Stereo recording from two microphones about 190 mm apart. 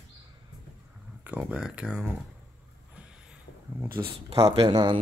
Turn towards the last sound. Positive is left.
turn(degrees=-25)  # may be behind; listen again after turning